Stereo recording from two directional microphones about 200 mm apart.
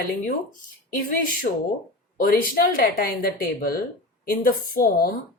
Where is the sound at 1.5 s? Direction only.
45° left (ahead or behind).